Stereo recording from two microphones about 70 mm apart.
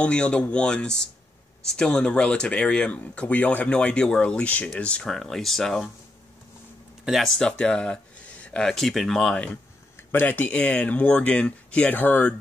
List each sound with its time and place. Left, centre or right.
0.0 s speech: centre
7.1 s speech: centre
8.6 s speech: centre
10.1 s speech: left